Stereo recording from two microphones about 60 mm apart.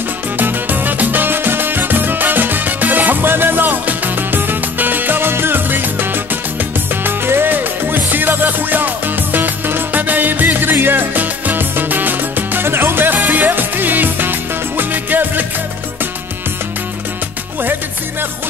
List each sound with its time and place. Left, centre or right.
0.4 s music: right